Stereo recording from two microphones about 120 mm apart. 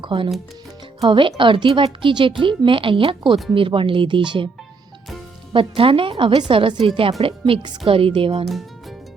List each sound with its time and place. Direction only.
0.0 s speech: 45° right (ahead or behind)
5.5 s speech: 45° right (ahead or behind)